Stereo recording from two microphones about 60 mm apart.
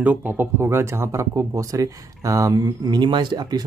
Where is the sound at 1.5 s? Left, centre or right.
Right.